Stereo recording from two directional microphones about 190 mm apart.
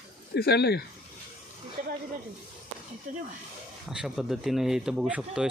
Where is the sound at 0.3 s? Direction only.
55° left (ahead or behind).